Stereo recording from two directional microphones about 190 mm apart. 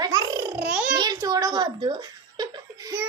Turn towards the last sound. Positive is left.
turn(degrees=-20)  # may be behind; listen again after turning